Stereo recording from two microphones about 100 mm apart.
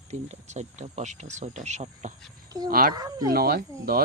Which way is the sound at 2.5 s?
40° right (ahead or behind).